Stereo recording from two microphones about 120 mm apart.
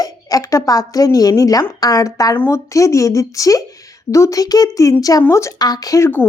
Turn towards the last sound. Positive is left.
turn(degrees=20)  # may be behind; listen again after turning